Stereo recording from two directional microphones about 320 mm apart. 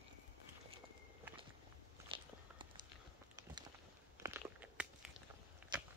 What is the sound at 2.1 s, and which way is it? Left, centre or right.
Biting, centre.